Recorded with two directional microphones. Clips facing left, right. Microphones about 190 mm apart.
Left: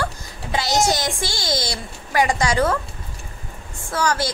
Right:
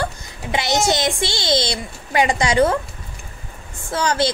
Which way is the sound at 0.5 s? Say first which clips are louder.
Right 1 dB; 25° right (ahead or behind).